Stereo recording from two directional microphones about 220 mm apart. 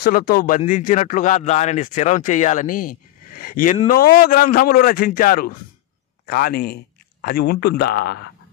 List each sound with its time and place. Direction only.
0.0 s a man's voice: 40° left (ahead or behind)